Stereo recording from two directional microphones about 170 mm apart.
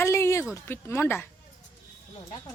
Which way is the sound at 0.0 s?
15° left (ahead or behind).